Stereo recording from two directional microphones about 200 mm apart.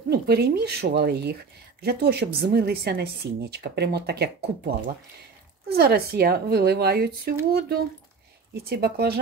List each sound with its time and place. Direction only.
0.1 s a woman's voice: 55° right (ahead or behind)
8.6 s a woman's voice: 50° right (ahead or behind)